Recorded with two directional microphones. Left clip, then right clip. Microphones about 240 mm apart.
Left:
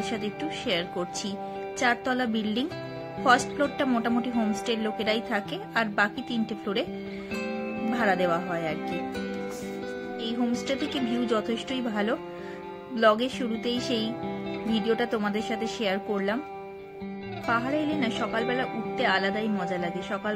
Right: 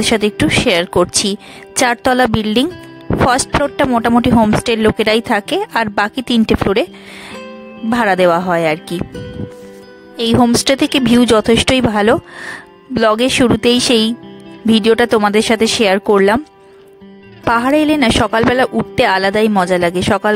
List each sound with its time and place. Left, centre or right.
0.0 s speech: right
7.9 s speech: right
10.1 s speech: right
17.5 s speech: right